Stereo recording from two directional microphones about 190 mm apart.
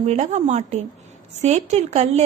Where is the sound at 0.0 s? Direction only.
35° right (ahead or behind).